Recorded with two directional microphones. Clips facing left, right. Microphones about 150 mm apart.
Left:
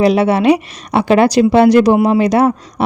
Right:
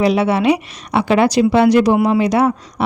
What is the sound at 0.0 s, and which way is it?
A woman's voice, 40° left (ahead or behind).